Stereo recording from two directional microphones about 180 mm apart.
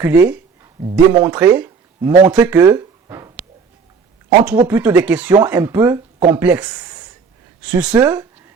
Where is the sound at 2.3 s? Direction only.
10° right (ahead or behind).